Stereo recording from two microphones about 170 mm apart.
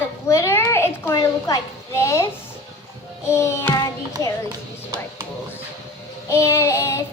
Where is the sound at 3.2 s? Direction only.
15° left (ahead or behind).